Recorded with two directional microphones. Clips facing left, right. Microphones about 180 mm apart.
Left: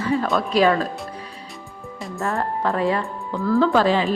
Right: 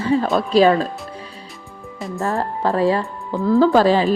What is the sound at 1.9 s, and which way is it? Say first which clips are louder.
Music: right 5 dB; centre (ahead or behind).